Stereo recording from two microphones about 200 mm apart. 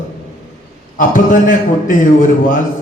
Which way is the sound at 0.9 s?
40° left (ahead or behind).